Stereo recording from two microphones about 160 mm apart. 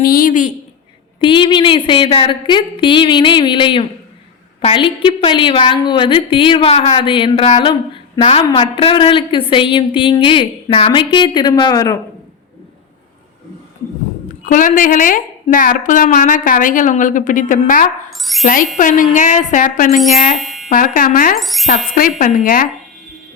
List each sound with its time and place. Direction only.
0.0 s a woman's voice: 65° left (ahead or behind)
1.2 s a woman's voice: 30° left (ahead or behind)
14.4 s a woman's voice: 55° left (ahead or behind)
18.1 s speech: centre (ahead or behind)
18.4 s a woman's voice: 60° left (ahead or behind)
20.4 s a sound: centre (ahead or behind)
20.7 s a woman's voice: 60° left (ahead or behind)
21.3 s speech: centre (ahead or behind)
21.8 s a woman's voice: 60° left (ahead or behind)